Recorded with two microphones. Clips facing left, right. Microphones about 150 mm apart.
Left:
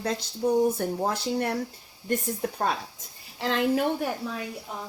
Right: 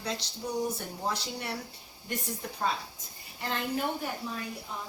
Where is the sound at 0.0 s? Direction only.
50° left (ahead or behind).